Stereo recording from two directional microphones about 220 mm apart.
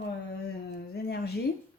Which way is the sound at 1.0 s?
45° left (ahead or behind).